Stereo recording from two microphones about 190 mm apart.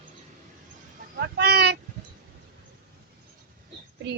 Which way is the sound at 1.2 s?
60° right (ahead or behind).